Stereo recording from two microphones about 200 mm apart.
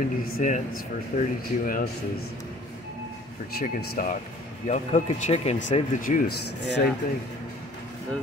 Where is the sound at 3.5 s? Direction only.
50° left (ahead or behind).